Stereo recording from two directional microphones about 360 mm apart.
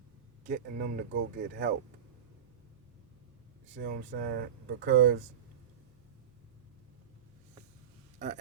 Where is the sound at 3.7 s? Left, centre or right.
Right.